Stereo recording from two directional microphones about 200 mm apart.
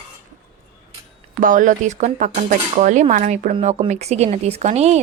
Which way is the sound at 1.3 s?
40° right (ahead or behind).